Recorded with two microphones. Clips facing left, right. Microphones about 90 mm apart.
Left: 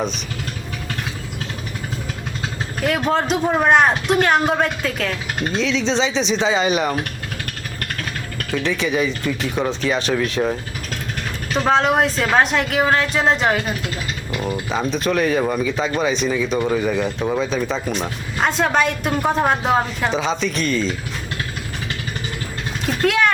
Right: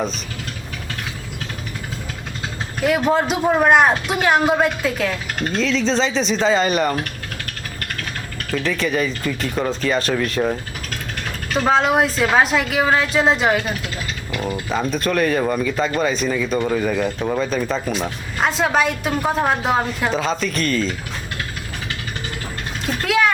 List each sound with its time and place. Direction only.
2.8 s speech: 5° right (ahead or behind)
8.5 s speech: centre (ahead or behind)
22.9 s vehicle: centre (ahead or behind)